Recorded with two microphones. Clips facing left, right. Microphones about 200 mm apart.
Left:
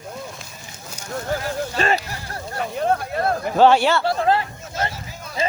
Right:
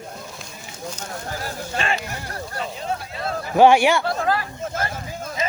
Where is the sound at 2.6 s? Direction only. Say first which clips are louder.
Left 7 dB; 55° left (ahead or behind).